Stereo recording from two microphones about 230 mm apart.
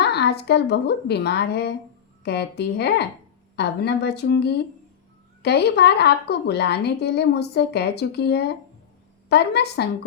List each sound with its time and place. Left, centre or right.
0.0 s a woman's voice: left